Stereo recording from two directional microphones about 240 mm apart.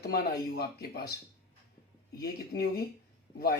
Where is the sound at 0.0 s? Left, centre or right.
Left.